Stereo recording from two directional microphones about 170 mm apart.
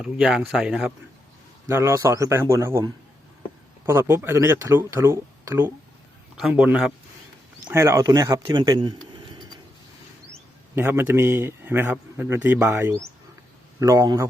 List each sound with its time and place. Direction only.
0.0 s speech: 5° right (ahead or behind)
1.6 s a man's voice: 15° right (ahead or behind)
7.7 s speech: 15° right (ahead or behind)
10.8 s a man's voice: 15° right (ahead or behind)